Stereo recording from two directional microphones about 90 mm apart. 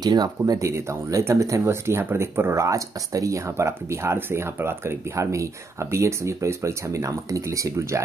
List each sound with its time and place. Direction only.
0.0 s speech: 50° right (ahead or behind)